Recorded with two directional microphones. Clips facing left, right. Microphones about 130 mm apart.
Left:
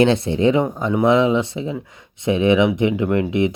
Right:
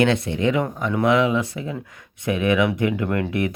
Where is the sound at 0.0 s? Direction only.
30° left (ahead or behind).